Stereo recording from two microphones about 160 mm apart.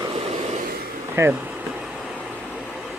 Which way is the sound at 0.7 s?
70° right (ahead or behind).